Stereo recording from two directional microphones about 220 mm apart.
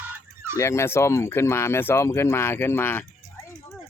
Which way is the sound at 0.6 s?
10° left (ahead or behind).